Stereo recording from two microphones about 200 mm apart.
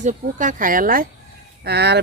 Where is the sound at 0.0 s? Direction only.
40° right (ahead or behind).